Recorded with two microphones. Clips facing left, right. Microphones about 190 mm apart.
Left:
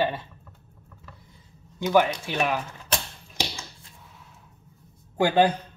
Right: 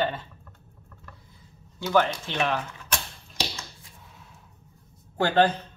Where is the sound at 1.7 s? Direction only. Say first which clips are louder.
Left 2 dB; 15° left (ahead or behind).